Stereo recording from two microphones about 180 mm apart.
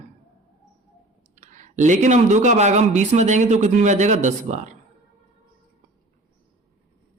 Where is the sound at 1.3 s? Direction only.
45° right (ahead or behind).